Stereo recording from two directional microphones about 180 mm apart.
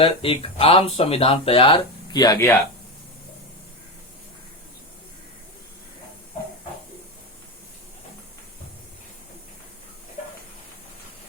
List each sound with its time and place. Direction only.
0.0 s speech: 30° left (ahead or behind)